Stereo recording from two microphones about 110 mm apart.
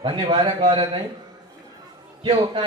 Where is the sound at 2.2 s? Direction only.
45° right (ahead or behind).